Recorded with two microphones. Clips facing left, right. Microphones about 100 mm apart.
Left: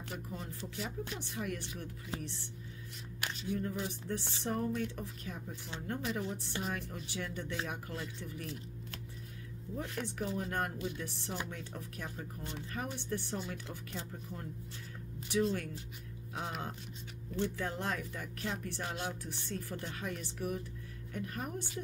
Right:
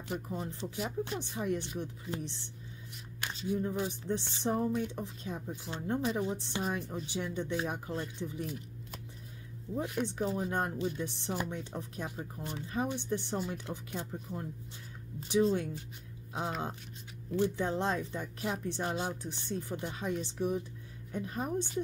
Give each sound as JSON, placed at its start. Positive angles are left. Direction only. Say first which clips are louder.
{"t": 0.3, "sound": "speech", "louder": "right 5 dB", "side_deg": -25}
{"t": 9.8, "sound": "speech", "louder": "right 5 dB", "side_deg": -15}